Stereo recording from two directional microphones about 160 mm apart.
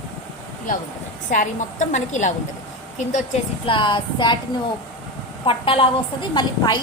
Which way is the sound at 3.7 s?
30° left (ahead or behind).